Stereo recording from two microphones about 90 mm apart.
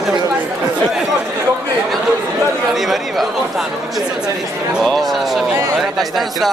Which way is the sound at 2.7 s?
Centre (ahead or behind).